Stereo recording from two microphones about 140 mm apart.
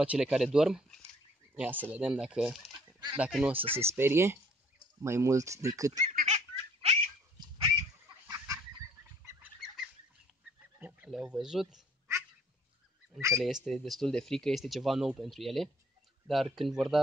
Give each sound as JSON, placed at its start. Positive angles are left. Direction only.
{"t": 0.0, "sound": "speech", "side_deg": -10}
{"t": 1.5, "sound": "speech", "side_deg": -15}
{"t": 5.9, "sound": "baby laughter", "side_deg": -55}
{"t": 7.3, "sound": "duck", "side_deg": -35}
{"t": 8.1, "sound": "fowl", "side_deg": -35}
{"t": 9.4, "sound": "fowl", "side_deg": -5}
{"t": 10.8, "sound": "a sound", "side_deg": -10}
{"t": 11.1, "sound": "speech", "side_deg": -5}
{"t": 13.7, "sound": "speech", "side_deg": 0}